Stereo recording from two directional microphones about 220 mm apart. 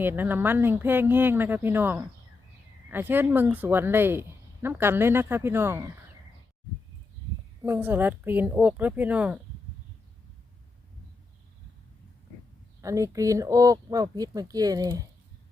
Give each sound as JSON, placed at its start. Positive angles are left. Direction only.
{"t": 0.0, "sound": "speech", "side_deg": -10}
{"t": 7.6, "sound": "speech", "side_deg": -10}
{"t": 12.8, "sound": "speech", "side_deg": -15}